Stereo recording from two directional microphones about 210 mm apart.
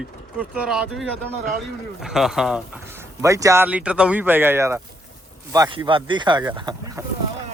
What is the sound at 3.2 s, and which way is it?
Speech, 15° right (ahead or behind).